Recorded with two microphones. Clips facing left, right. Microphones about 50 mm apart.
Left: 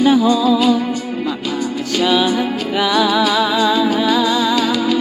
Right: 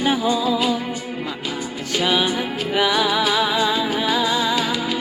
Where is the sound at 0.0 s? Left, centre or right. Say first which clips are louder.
Left 7 dB; right.